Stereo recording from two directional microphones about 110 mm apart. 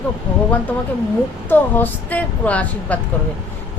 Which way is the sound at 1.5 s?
15° left (ahead or behind).